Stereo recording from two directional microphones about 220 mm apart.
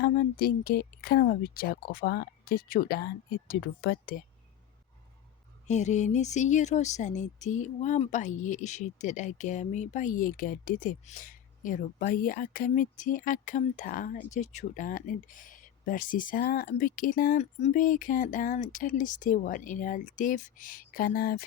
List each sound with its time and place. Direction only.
0.0 s speech: 45° left (ahead or behind)
5.6 s speech: 30° left (ahead or behind)